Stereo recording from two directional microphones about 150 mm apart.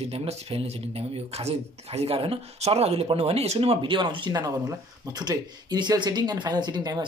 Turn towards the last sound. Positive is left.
turn(degrees=-25)  # may be behind; listen again after turning